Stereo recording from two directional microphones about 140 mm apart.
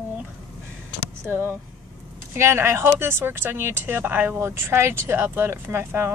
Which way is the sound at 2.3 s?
20° right (ahead or behind).